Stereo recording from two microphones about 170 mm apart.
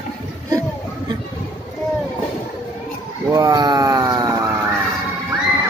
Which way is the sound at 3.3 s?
20° right (ahead or behind).